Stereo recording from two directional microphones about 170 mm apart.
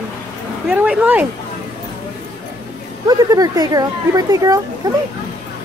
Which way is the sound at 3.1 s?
20° right (ahead or behind).